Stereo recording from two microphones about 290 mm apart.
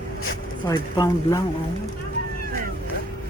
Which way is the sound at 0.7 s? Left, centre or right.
Centre.